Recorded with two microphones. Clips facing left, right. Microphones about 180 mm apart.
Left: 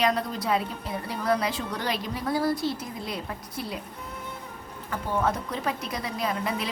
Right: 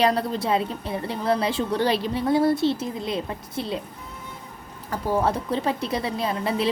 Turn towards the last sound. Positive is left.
turn(degrees=-30)  # may be behind; listen again after turning